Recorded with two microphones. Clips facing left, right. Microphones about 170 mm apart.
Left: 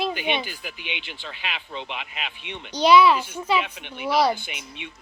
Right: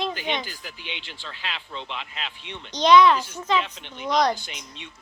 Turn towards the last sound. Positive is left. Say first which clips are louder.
# left 3 dB
turn(degrees=10)  # may be behind; listen again after turning